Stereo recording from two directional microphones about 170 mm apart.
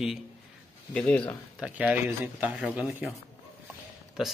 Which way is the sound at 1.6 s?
10° right (ahead or behind).